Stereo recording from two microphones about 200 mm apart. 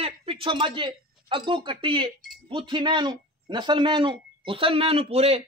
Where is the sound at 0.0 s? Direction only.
30° right (ahead or behind).